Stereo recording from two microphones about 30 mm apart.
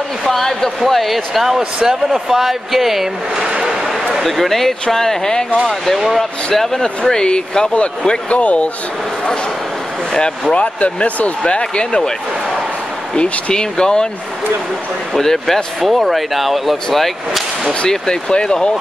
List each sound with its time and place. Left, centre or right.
0.3 s speech: centre
0.8 s speech: centre
3.4 s a sound: right
4.1 s speech: centre
7.1 s speech: left
8.3 s speech: left
10.5 s speech: left
11.4 s speech: left
13.1 s speech: left
15.1 s speech: centre
15.8 s speech: centre
17.8 s speech: left